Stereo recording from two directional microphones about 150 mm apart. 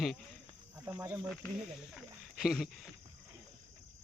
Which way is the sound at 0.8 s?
20° right (ahead or behind).